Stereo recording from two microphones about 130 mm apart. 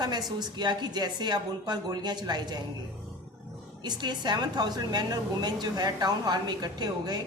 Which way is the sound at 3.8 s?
35° right (ahead or behind).